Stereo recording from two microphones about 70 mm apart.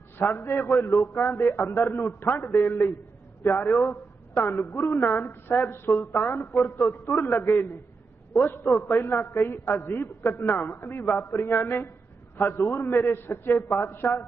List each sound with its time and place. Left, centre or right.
0.2 s a woman's voice: left
10.2 s a man's voice: left